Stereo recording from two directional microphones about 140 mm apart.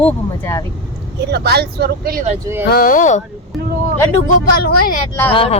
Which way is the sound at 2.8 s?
75° left (ahead or behind).